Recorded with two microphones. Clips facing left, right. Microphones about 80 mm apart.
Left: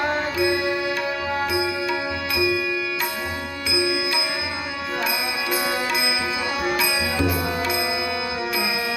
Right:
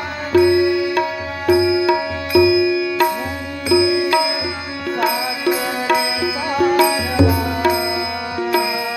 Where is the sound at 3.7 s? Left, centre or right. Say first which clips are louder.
Right 11 dB; right.